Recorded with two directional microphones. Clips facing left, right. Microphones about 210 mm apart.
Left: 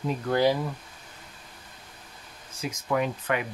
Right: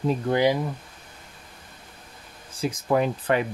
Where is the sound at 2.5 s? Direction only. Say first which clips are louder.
Right 5 dB; 35° right (ahead or behind).